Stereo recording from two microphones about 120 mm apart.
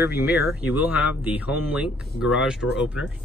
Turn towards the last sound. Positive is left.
turn(degrees=-10)  # may be behind; listen again after turning